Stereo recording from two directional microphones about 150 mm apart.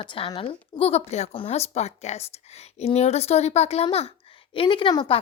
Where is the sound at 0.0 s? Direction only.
35° left (ahead or behind).